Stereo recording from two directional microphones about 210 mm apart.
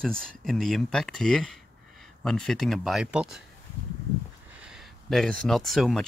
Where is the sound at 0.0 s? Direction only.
5° left (ahead or behind).